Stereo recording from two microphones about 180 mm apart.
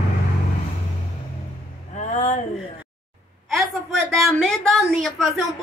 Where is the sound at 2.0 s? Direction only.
40° left (ahead or behind).